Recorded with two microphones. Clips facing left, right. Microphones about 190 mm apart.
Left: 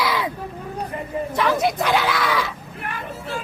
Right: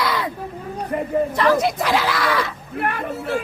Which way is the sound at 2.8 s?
65° right (ahead or behind).